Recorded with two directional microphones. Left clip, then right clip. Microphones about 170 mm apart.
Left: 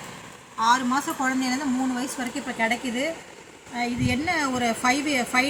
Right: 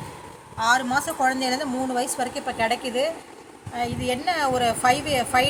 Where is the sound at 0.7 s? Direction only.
75° right (ahead or behind).